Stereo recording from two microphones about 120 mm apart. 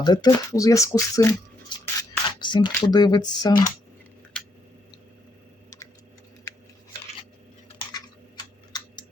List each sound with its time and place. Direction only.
0.0 s speech: 35° left (ahead or behind)
2.0 s speech: 40° left (ahead or behind)